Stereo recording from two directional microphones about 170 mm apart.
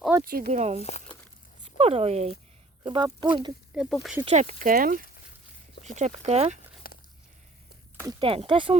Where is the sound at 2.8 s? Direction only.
30° right (ahead or behind).